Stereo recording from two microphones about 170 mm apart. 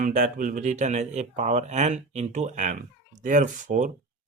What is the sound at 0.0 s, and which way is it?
Speech, 50° right (ahead or behind).